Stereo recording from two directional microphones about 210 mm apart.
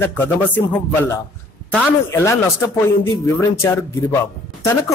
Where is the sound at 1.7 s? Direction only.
10° left (ahead or behind).